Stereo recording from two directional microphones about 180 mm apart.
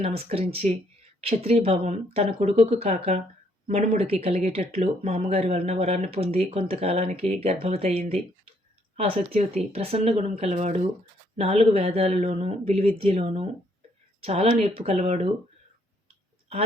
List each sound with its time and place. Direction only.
0.0 s speech: 35° right (ahead or behind)